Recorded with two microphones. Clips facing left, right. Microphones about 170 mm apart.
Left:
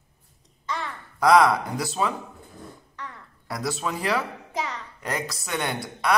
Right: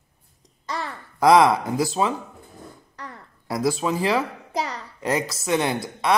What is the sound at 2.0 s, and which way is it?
Speech, 20° right (ahead or behind).